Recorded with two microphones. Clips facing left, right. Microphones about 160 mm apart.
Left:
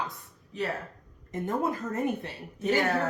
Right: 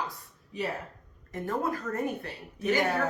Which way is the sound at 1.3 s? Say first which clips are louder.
Left 1 dB; 20° left (ahead or behind).